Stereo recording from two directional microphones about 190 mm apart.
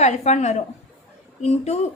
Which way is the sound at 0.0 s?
35° left (ahead or behind).